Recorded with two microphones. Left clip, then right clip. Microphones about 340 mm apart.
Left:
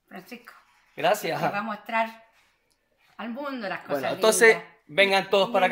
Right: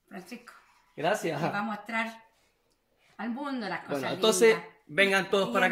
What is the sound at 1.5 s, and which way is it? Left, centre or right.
Speech, centre.